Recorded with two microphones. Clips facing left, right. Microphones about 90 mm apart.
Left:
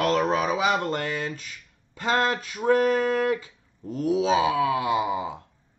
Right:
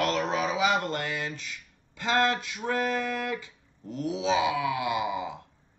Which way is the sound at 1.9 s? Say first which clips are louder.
Left 2 dB; 40° left (ahead or behind).